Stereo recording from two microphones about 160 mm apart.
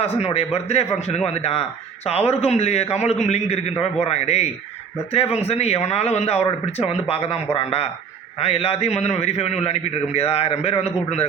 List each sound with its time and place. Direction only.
0.0 s a man's voice: 40° left (ahead or behind)